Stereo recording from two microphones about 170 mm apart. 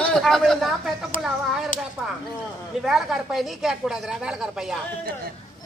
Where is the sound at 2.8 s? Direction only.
Centre (ahead or behind).